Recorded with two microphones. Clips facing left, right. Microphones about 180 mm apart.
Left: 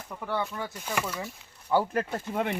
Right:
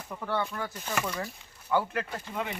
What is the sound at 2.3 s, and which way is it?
Speech, 55° left (ahead or behind).